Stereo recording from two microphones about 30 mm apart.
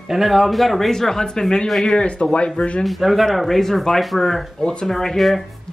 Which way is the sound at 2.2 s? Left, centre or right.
Left.